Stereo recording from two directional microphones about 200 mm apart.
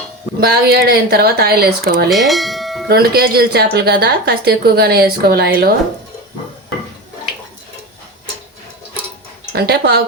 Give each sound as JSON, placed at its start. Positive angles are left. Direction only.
{"t": 0.3, "sound": "a woman's voice", "side_deg": -50}
{"t": 2.0, "sound": "speech", "side_deg": 0}
{"t": 2.9, "sound": "a woman's voice", "side_deg": -50}
{"t": 9.5, "sound": "a woman's voice", "side_deg": -55}